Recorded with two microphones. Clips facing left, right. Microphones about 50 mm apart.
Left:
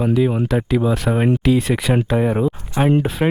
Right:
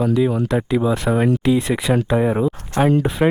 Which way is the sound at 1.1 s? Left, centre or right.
Left.